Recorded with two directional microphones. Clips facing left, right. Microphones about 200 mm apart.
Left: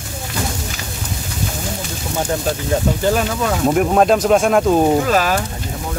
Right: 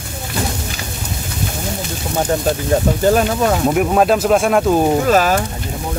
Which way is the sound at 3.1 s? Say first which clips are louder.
Right 5 dB; 40° right (ahead or behind).